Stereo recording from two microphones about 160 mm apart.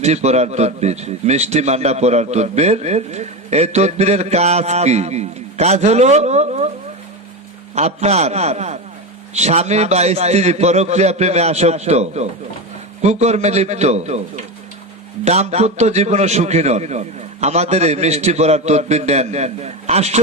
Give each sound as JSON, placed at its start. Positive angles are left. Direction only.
{"t": 0.0, "sound": "a man's voice", "side_deg": -45}
{"t": 7.8, "sound": "a man's voice", "side_deg": -40}